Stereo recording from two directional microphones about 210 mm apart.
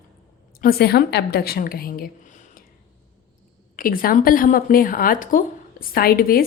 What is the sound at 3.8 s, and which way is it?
Speech, 40° left (ahead or behind).